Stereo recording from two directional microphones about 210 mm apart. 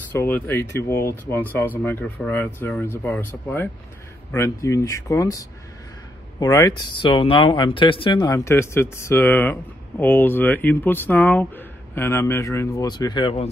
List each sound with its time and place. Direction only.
0.1 s speech: 10° left (ahead or behind)